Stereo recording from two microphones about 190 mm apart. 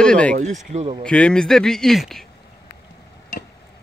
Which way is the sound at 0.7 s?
35° right (ahead or behind).